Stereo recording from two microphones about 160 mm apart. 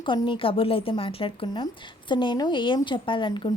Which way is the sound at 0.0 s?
30° left (ahead or behind).